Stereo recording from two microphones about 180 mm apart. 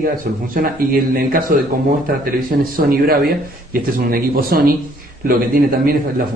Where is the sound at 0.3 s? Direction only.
55° right (ahead or behind).